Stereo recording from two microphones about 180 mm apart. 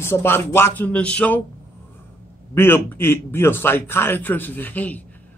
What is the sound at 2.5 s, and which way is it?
A man's voice, 10° left (ahead or behind).